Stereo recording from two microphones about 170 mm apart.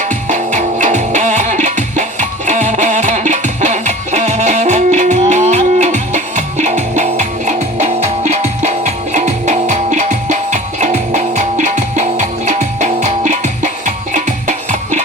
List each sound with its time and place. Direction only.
0.0 s music: 45° right (ahead or behind)